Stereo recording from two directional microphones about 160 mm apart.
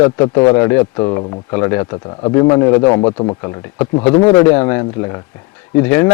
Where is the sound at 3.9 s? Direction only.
40° left (ahead or behind).